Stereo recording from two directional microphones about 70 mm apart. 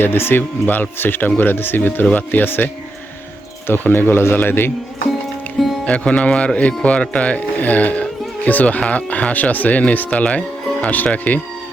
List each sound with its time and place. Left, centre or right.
0.0 s speech: left
3.7 s speech: left
5.8 s speech: centre